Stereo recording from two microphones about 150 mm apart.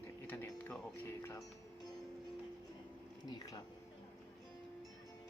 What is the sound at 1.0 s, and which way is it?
Speech, 20° left (ahead or behind).